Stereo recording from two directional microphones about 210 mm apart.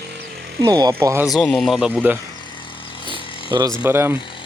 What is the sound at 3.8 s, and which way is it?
Speech, 10° right (ahead or behind).